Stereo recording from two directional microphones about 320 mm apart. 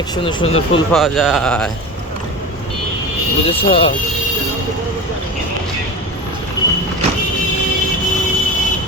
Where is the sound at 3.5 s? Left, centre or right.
Centre.